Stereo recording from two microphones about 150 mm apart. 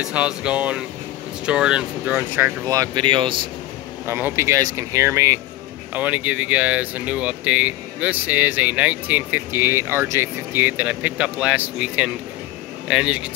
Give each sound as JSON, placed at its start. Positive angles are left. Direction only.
{"t": 0.0, "sound": "speech", "side_deg": -5}
{"t": 4.0, "sound": "speech", "side_deg": -15}